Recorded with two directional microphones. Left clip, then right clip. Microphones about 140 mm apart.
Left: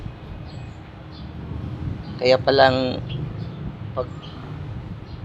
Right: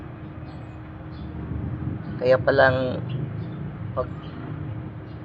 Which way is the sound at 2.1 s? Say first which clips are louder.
Left 2 dB; 35° left (ahead or behind).